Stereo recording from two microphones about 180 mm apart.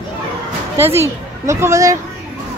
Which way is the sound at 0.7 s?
15° right (ahead or behind).